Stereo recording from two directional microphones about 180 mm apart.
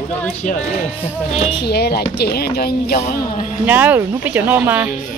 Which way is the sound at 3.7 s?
10° right (ahead or behind).